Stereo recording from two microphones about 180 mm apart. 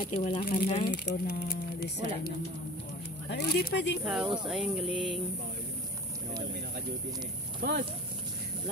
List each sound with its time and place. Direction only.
0.1 s speech: 35° left (ahead or behind)
0.8 s speech: 60° left (ahead or behind)
3.3 s speech: 70° left (ahead or behind)
4.0 s music: 5° right (ahead or behind)
7.6 s speech: 60° right (ahead or behind)